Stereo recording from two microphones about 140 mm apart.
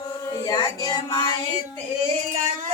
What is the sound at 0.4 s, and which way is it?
Music, 30° left (ahead or behind).